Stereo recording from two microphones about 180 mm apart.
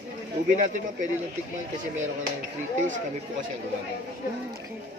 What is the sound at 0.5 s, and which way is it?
Speech, 45° right (ahead or behind).